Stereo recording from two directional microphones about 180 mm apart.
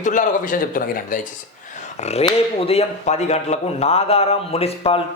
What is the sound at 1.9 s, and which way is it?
Speech, 35° left (ahead or behind).